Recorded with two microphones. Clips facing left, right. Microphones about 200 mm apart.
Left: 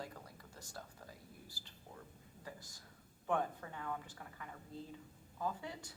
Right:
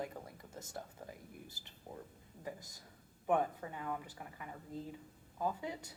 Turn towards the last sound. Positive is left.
turn(degrees=-15)  # may be behind; listen again after turning